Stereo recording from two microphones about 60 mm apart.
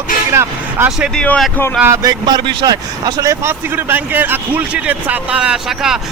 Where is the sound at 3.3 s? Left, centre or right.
Right.